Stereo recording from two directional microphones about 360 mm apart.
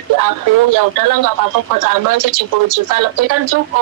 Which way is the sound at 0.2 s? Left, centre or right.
Right.